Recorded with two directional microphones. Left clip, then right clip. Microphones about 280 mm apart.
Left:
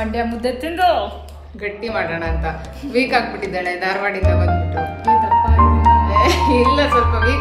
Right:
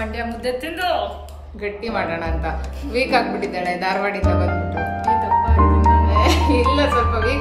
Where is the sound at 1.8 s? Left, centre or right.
Centre.